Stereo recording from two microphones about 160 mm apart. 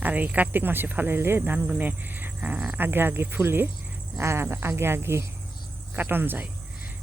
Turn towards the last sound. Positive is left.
turn(degrees=-10)  # may be behind; listen again after turning